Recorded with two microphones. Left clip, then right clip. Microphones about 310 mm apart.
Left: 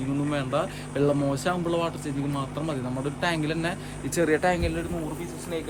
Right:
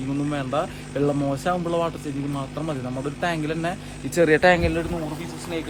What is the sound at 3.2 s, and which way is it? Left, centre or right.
Speech, centre.